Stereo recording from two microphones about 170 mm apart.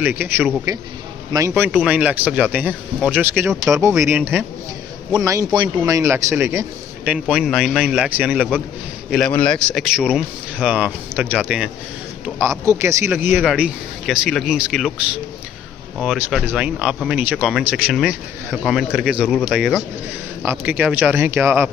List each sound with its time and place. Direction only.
0.0 s speech: 10° right (ahead or behind)
1.5 s a man's voice: 5° right (ahead or behind)
9.1 s speech: 5° left (ahead or behind); by 13.4 s 15° right (ahead or behind)
13.4 s speech: 5° right (ahead or behind)
16.0 s speech: 5° right (ahead or behind)